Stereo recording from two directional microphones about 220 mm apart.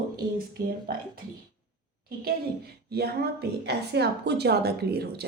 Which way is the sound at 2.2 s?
45° right (ahead or behind).